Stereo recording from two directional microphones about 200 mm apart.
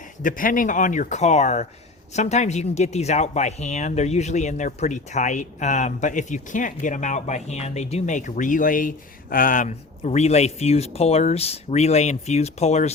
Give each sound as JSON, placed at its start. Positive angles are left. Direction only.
{"t": 0.2, "sound": "speech", "side_deg": 45}